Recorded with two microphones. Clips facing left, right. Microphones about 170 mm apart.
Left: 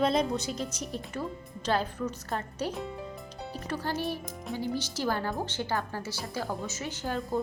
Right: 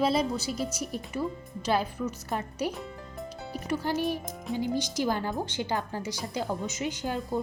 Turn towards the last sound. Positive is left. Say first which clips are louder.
# right 3 dB
turn(degrees=-15)  # may be behind; listen again after turning